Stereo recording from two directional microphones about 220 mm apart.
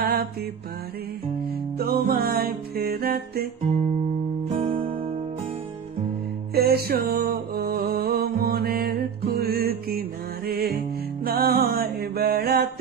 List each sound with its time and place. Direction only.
0.0 s mantra: 45° right (ahead or behind)
1.8 s music: 45° right (ahead or behind)
4.5 s music: 30° right (ahead or behind)
6.5 s music: 45° right (ahead or behind)